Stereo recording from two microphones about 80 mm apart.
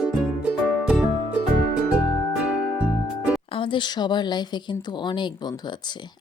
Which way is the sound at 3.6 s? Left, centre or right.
Left.